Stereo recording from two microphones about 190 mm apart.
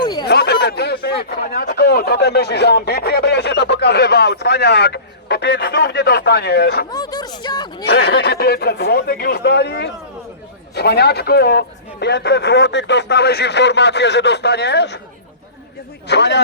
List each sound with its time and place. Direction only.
0.0 s a sound: 25° left (ahead or behind)
0.3 s speech: 60° left (ahead or behind)
6.9 s speech: 20° left (ahead or behind)
7.9 s a man's voice: 60° left (ahead or behind)
16.0 s a man's voice: 65° left (ahead or behind)